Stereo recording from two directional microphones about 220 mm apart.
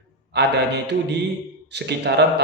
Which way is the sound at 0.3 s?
50° right (ahead or behind).